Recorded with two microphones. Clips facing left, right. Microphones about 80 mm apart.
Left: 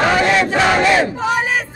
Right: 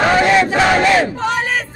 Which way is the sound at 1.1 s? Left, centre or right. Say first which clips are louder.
Left 1 dB; centre.